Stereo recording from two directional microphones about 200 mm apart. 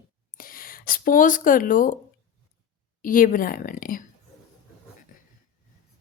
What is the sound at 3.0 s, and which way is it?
A woman's voice, 45° left (ahead or behind).